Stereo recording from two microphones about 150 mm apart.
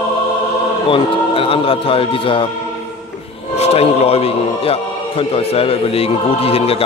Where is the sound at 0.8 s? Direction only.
35° left (ahead or behind).